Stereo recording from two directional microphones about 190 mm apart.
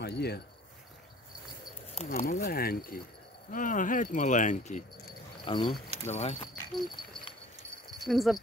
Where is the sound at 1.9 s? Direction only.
35° left (ahead or behind).